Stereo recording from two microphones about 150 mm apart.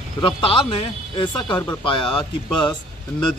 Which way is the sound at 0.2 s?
35° left (ahead or behind).